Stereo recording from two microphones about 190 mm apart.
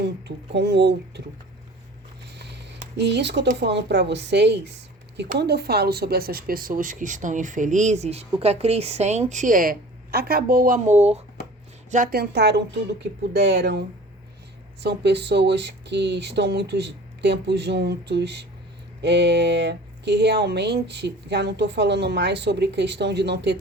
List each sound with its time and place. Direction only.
0.0 s speech: 60° right (ahead or behind)
2.3 s a sound: 65° right (ahead or behind)
3.0 s speech: 65° right (ahead or behind); by 11.2 s 35° right (ahead or behind)
11.9 s speech: 45° right (ahead or behind); by 23.6 s 65° right (ahead or behind)